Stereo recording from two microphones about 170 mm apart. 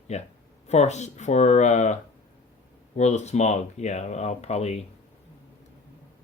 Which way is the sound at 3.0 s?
40° left (ahead or behind).